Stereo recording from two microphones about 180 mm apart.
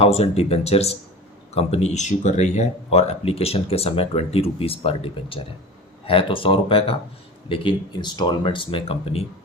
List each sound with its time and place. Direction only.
0.0 s speech: 35° left (ahead or behind)